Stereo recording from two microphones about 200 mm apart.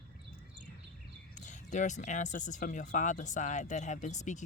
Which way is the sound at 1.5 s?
40° left (ahead or behind).